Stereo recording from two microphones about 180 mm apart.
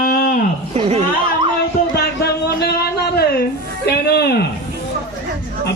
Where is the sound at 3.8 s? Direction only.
60° left (ahead or behind).